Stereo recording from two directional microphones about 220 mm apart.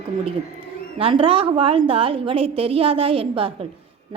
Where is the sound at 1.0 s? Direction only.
25° right (ahead or behind).